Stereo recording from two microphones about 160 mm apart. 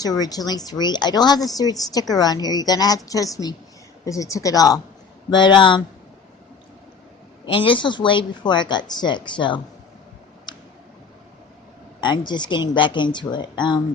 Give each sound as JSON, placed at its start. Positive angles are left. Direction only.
{"t": 0.0, "sound": "a woman's voice", "side_deg": 25}
{"t": 7.4, "sound": "a woman's voice", "side_deg": 35}
{"t": 10.5, "sound": "tick", "side_deg": 30}
{"t": 11.9, "sound": "a woman's voice", "side_deg": 30}